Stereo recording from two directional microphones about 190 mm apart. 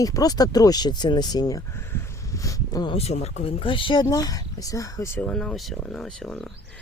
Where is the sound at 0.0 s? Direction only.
20° left (ahead or behind).